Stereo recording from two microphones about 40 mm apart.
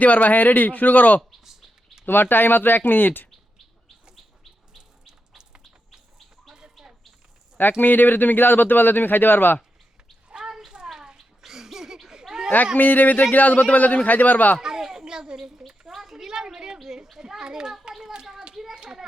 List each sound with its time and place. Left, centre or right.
0.0 s speech: left
2.0 s speech: left
5.4 s insect: right
7.6 s speech: left
10.2 s a sound: centre
12.7 s speech: left
14.6 s a sound: centre
15.9 s children playing: centre
17.8 s a sound: centre
18.8 s children playing: centre